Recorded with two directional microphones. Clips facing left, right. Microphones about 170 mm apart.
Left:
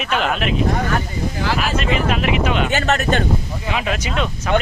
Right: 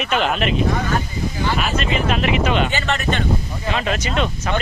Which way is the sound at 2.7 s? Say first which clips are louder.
Left 4 dB; 45° left (ahead or behind).